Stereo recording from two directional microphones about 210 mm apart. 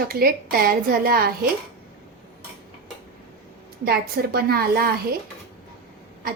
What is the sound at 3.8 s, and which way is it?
A woman's voice, 45° right (ahead or behind).